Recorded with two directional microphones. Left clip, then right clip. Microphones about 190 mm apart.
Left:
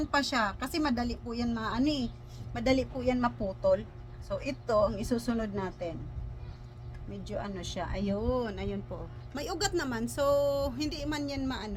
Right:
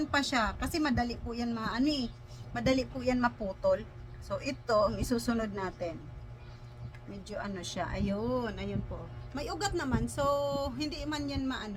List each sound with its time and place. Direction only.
0.1 s a woman's voice: 20° left (ahead or behind)
7.3 s a woman's voice: 15° left (ahead or behind); by 11.7 s 30° left (ahead or behind)